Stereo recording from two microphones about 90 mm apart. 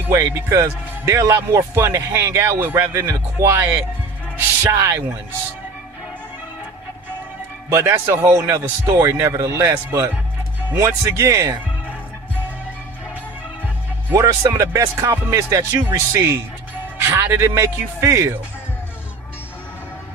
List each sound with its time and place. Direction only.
0.1 s speech: 30° right (ahead or behind)
7.7 s speech: 30° right (ahead or behind)
14.1 s speech: 35° right (ahead or behind)